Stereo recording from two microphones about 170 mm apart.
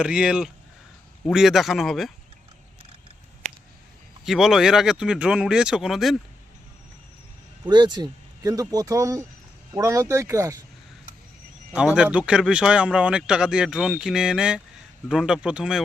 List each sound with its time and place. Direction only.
0.0 s a man's voice: 5° right (ahead or behind)
4.3 s a man's voice: centre (ahead or behind)
7.7 s speech: 25° right (ahead or behind)
11.7 s a man's voice: 5° right (ahead or behind)